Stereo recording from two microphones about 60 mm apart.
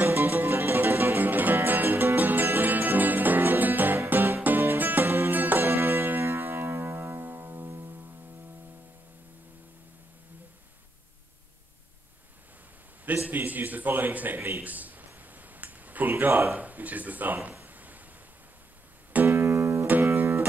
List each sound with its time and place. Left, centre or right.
0.0 s music: right
13.0 s a man's voice: right
14.6 s a sound: right
16.5 s a man's voice: right
17.6 s a sound: right
19.2 s music: right